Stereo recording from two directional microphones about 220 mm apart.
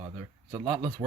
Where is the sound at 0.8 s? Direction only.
20° right (ahead or behind).